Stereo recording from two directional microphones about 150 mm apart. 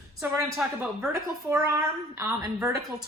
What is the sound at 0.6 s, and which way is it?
Speech, 5° right (ahead or behind).